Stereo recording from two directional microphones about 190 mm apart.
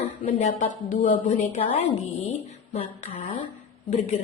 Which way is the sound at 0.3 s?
35° left (ahead or behind).